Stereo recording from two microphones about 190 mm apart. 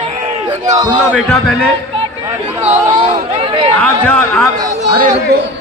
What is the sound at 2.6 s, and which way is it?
Speech, 40° right (ahead or behind).